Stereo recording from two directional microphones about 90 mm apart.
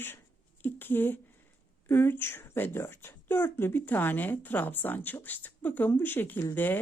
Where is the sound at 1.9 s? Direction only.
25° left (ahead or behind).